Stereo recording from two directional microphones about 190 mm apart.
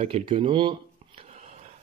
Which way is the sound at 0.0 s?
30° right (ahead or behind).